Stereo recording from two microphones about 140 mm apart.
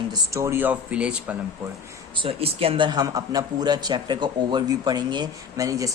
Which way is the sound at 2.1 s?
40° right (ahead or behind).